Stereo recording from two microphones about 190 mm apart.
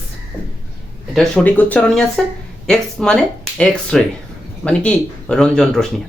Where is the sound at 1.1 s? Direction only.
5° left (ahead or behind).